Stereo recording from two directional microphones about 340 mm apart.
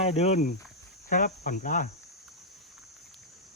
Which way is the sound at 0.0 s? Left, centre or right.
Centre.